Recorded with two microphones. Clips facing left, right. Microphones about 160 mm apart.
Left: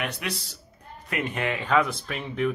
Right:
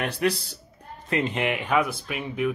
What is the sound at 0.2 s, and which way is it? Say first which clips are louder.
Speech: right 9 dB; 40° right (ahead or behind).